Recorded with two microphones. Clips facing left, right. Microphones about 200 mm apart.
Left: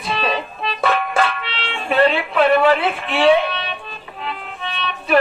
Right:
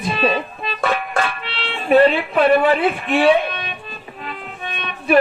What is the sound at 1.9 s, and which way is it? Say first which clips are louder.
Speech: right 3 dB; 45° right (ahead or behind).